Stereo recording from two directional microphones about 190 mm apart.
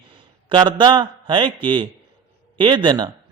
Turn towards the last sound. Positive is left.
turn(degrees=-25)  # may be behind; listen again after turning